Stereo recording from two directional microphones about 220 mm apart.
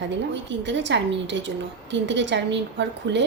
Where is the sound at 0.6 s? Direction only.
55° right (ahead or behind).